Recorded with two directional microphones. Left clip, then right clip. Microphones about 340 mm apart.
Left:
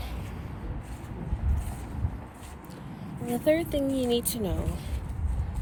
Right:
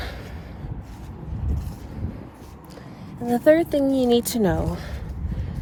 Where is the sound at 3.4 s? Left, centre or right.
Centre.